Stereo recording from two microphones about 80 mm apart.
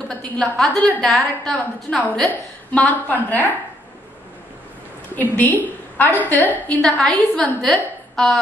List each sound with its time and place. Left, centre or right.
0.1 s a woman's voice: centre
2.7 s a woman's voice: centre
5.1 s a woman's voice: left; by 8.4 s centre